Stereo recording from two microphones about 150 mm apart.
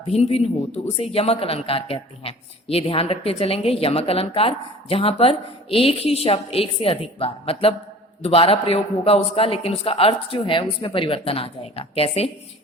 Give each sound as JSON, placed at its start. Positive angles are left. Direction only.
{"t": 0.1, "sound": "speech", "side_deg": 45}